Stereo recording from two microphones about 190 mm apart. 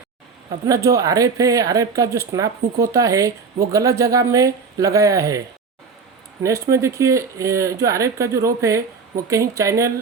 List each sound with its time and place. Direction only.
0.6 s speech: 15° right (ahead or behind)
6.4 s speech: 15° right (ahead or behind)